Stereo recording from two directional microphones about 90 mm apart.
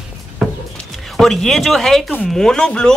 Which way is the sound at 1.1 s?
5° left (ahead or behind).